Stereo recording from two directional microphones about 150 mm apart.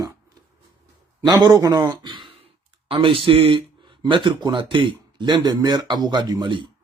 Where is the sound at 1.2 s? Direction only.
25° right (ahead or behind).